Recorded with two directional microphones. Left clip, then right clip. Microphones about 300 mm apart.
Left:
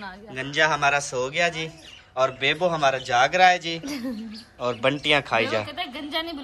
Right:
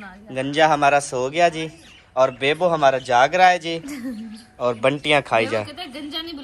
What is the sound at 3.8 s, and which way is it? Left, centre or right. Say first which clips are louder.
Speech: left 1 dB; left.